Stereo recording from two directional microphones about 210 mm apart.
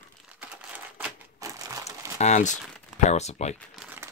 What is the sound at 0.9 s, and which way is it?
Crumpling, 10° right (ahead or behind).